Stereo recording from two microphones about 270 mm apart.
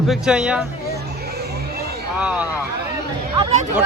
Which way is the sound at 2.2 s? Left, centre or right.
Centre.